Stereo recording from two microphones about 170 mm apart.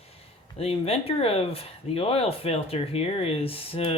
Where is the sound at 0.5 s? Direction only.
35° left (ahead or behind).